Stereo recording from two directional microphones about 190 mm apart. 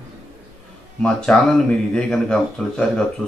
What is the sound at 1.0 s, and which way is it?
Speech, 5° left (ahead or behind).